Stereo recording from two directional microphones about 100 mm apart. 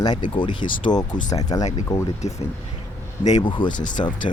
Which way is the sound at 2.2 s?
90° left.